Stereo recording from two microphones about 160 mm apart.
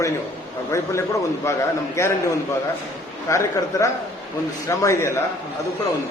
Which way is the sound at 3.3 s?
20° left (ahead or behind).